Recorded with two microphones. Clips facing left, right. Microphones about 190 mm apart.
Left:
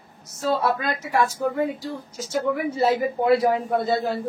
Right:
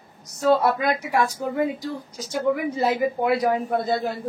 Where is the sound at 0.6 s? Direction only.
15° right (ahead or behind).